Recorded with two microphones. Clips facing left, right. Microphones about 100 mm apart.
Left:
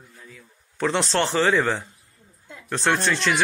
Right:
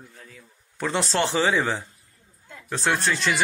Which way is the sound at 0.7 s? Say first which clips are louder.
Left 2 dB; centre (ahead or behind).